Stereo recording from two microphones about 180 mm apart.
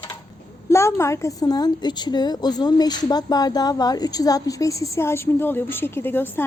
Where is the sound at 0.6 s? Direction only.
15° left (ahead or behind).